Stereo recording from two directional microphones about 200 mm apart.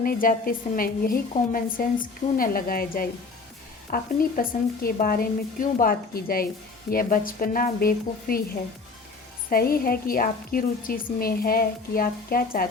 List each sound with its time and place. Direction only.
0.0 s a woman's voice: 45° left (ahead or behind)
9.5 s a woman's voice: 50° left (ahead or behind)